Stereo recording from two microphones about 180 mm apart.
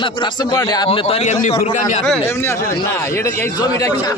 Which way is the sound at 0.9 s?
35° left (ahead or behind).